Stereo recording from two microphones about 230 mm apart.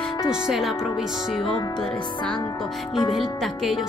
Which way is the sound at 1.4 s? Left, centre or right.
Centre.